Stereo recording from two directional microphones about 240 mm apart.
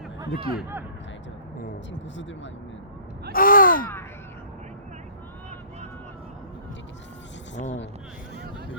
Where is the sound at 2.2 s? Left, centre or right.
Left.